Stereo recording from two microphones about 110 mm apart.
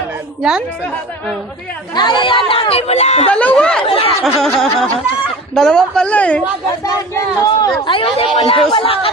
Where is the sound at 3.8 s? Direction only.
60° left (ahead or behind).